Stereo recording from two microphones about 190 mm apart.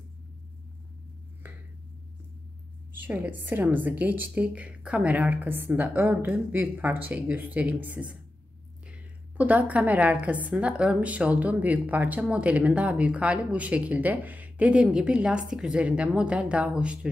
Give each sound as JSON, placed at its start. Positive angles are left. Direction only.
{"t": 2.9, "sound": "a woman's voice", "side_deg": -10}